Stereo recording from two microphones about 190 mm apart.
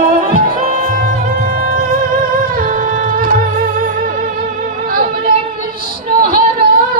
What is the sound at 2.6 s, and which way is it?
Music, 40° right (ahead or behind).